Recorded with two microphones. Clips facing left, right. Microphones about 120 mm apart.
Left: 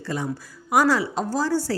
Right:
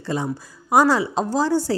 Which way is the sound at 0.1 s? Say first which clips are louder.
Right 3 dB; 25° right (ahead or behind).